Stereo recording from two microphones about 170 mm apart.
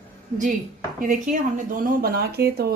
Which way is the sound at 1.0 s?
50° right (ahead or behind).